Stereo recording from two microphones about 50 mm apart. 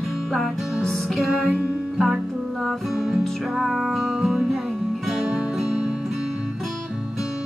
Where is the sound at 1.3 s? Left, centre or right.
Centre.